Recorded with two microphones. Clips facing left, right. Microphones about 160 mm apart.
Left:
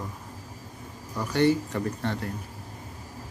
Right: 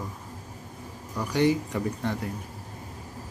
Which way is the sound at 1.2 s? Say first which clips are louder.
Left 1 dB; 10° right (ahead or behind).